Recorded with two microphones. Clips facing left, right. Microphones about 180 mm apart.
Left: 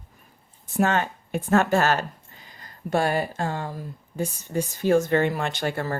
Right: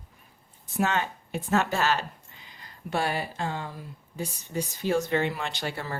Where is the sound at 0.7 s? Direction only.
50° left (ahead or behind).